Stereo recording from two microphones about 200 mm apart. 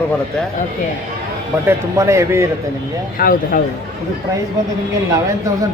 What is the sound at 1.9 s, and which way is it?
Speech, 15° right (ahead or behind).